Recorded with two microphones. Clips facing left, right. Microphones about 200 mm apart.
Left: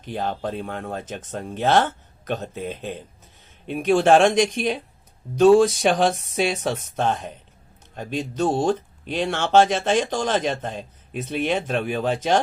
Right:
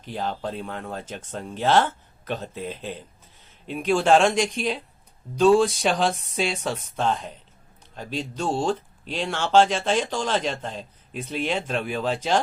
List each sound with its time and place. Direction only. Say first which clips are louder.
0.1 s speech: left 2 dB; 50° left (ahead or behind)